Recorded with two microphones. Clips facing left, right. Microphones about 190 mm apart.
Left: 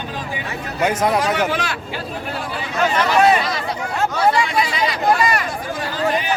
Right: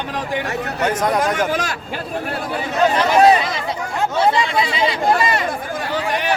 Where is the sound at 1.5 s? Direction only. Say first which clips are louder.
Right 1 dB; 45° right (ahead or behind).